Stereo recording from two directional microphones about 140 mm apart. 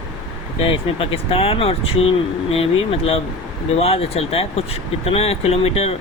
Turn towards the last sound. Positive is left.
turn(degrees=45)  # may be behind; listen again after turning